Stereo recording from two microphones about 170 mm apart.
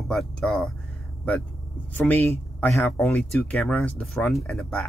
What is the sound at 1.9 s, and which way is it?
Speech, 10° left (ahead or behind).